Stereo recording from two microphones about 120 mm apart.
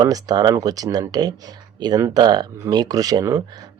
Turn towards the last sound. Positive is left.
turn(degrees=-30)  # may be behind; listen again after turning